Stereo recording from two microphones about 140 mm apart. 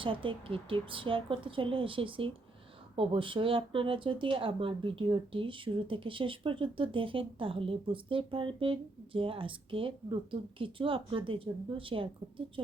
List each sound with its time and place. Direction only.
0.0 s speech: 40° right (ahead or behind)